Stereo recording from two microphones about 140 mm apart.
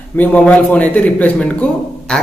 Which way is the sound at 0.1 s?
10° left (ahead or behind).